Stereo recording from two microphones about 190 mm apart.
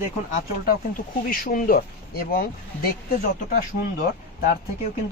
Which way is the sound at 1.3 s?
50° left (ahead or behind).